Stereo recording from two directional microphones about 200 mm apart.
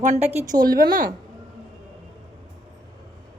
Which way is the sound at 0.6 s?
45° right (ahead or behind).